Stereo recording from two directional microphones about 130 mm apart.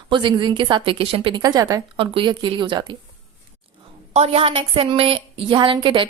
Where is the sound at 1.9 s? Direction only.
45° right (ahead or behind).